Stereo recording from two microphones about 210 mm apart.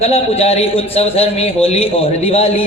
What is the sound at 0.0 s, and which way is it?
A man's voice, 30° left (ahead or behind).